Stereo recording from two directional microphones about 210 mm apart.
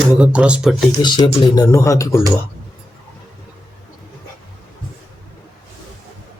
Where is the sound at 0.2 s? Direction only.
5° right (ahead or behind).